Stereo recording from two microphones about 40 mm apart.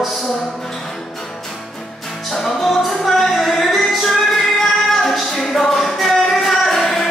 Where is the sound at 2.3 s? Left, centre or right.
Centre.